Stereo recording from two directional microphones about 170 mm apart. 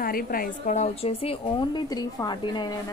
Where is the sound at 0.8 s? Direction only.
35° left (ahead or behind).